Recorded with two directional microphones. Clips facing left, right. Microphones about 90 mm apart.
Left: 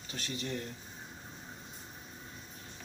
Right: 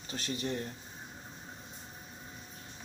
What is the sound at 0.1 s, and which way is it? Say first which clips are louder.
Speech: right 2 dB; 35° right (ahead or behind).